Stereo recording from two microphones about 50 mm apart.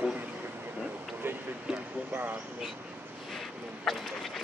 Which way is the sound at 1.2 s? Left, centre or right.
Right.